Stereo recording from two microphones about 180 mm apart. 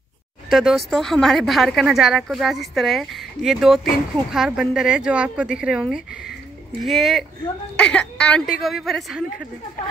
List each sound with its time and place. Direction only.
0.5 s a woman's voice: centre (ahead or behind)